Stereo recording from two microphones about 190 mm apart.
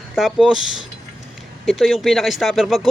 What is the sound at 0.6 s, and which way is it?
Speech, 90° left.